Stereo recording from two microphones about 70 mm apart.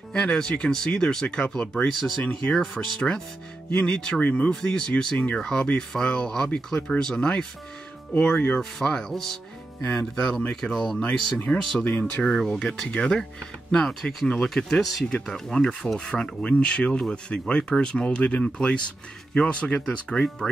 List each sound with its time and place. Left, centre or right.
0.1 s speech: centre
2.5 s speech: centre
4.5 s speech: centre
8.5 s speech: centre
11.8 s speech: left
12.2 s speech: centre